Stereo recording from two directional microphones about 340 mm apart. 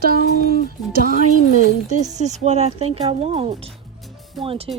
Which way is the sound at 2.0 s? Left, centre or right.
Right.